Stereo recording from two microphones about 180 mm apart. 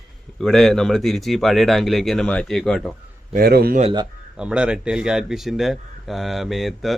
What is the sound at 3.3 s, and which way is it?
Speech, 60° right (ahead or behind).